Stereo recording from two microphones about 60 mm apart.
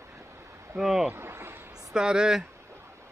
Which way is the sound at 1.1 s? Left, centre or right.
Right.